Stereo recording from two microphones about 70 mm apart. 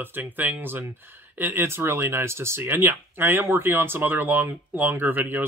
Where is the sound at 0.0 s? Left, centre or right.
Right.